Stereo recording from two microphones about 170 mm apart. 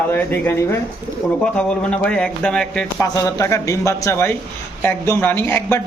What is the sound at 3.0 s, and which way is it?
Speech, 20° left (ahead or behind).